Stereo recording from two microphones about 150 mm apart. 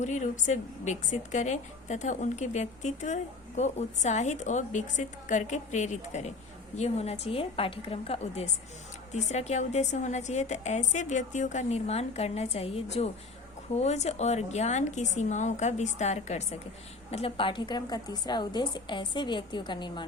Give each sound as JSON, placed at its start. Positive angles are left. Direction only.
{"t": 0.0, "sound": "a woman's voice", "side_deg": 55}